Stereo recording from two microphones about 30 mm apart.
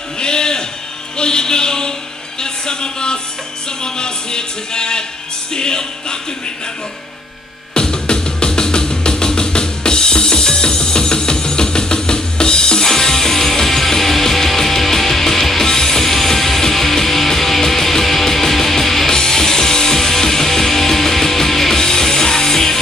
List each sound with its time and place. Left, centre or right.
0.2 s a sound: left
1.1 s speech: left
3.8 s music: left
7.7 s music: left
12.8 s music: centre